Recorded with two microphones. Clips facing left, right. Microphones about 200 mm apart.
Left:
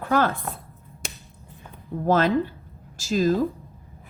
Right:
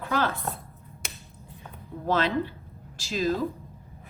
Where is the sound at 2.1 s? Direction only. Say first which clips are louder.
Left 5 dB; 45° left (ahead or behind).